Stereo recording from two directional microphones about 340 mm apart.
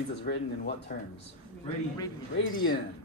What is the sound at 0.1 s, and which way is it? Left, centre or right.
Speech, left.